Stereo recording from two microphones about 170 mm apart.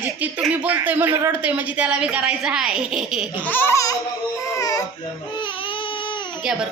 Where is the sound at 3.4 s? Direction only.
10° left (ahead or behind).